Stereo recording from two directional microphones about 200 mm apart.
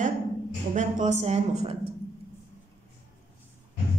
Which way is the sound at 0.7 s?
40° right (ahead or behind).